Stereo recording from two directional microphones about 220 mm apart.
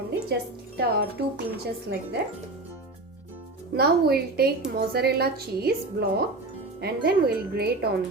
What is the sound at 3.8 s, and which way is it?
A woman's voice, 45° right (ahead or behind).